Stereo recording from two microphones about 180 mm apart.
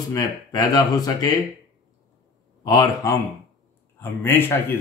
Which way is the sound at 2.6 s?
20° left (ahead or behind).